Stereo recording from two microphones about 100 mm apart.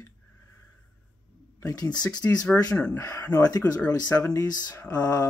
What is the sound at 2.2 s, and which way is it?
Speech, 15° left (ahead or behind).